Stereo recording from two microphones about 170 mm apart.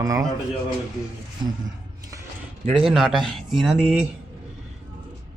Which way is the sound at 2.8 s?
Centre (ahead or behind).